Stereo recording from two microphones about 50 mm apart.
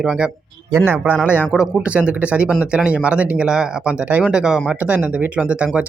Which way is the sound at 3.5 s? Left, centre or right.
Centre.